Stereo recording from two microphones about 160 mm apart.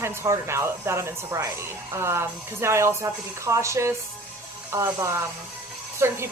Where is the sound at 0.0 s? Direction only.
15° right (ahead or behind).